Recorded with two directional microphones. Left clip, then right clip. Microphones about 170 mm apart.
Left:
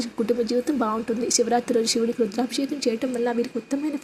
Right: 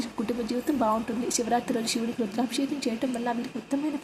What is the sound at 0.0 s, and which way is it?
A woman's voice, 15° left (ahead or behind).